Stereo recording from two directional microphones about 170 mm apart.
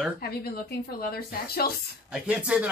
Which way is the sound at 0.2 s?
65° left (ahead or behind).